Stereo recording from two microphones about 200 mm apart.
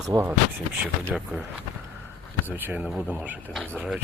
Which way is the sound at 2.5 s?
10° right (ahead or behind).